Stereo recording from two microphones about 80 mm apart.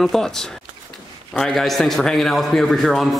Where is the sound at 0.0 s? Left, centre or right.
Centre.